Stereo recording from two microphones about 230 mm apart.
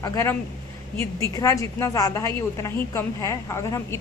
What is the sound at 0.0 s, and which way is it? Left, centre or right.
A woman's voice, centre.